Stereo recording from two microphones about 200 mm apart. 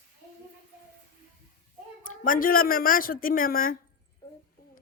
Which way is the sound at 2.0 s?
40° left (ahead or behind).